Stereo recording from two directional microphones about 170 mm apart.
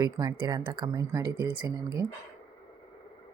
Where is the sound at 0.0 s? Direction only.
25° right (ahead or behind).